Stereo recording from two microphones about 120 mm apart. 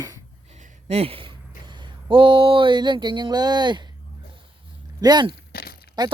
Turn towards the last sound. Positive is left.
turn(degrees=-35)  # may be behind; listen again after turning